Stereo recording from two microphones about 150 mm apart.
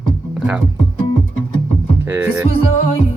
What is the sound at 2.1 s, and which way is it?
Speech, 15° right (ahead or behind).